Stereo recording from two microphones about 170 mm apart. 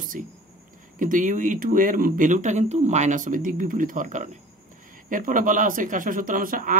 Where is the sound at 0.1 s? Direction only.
50° right (ahead or behind).